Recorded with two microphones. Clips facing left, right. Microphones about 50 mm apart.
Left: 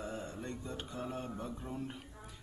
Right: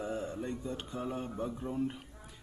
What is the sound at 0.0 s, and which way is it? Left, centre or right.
Mantra, centre.